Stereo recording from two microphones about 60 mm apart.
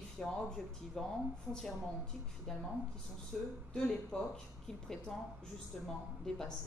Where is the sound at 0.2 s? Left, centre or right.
Centre.